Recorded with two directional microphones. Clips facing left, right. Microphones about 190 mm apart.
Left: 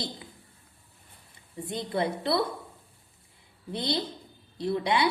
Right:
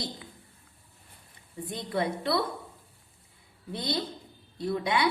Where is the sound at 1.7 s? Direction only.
30° left (ahead or behind).